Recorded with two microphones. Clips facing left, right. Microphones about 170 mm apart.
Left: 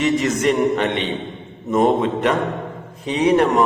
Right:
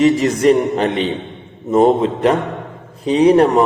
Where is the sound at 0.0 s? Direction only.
35° right (ahead or behind).